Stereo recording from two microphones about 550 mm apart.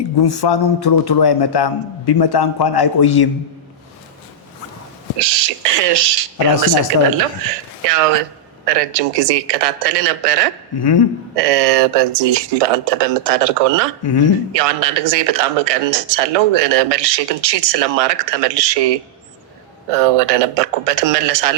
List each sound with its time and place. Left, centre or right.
0.2 s a man's voice: left
5.2 s speech: right
10.8 s a man's voice: left
11.3 s speech: right
14.0 s a man's voice: left
14.5 s speech: right